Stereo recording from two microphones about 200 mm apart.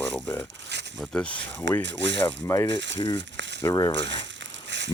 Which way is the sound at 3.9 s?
65° right (ahead or behind).